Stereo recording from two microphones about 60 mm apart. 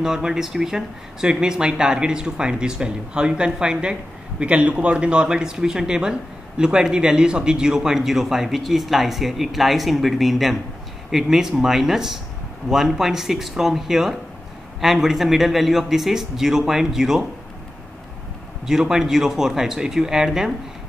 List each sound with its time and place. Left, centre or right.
0.0 s speech: centre
18.7 s speech: centre